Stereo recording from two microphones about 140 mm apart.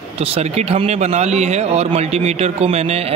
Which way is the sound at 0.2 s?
45° right (ahead or behind).